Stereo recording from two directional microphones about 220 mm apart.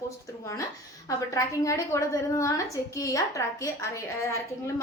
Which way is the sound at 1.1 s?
15° left (ahead or behind).